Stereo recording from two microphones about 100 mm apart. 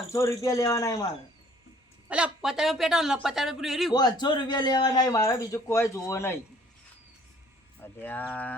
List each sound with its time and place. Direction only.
0.1 s a man's voice: 30° left (ahead or behind)
2.0 s speech: 10° right (ahead or behind)
3.9 s a man's voice: 45° left (ahead or behind); by 6.4 s 25° left (ahead or behind)
7.8 s speech: 20° left (ahead or behind)